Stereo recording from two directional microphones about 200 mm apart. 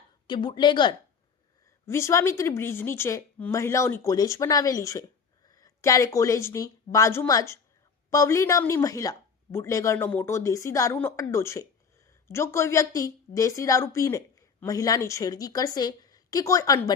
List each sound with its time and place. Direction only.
0.3 s speech: 25° left (ahead or behind)